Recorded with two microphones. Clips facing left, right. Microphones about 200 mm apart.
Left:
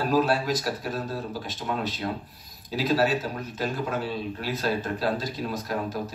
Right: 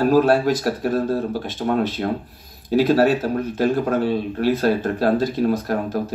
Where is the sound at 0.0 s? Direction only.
50° right (ahead or behind).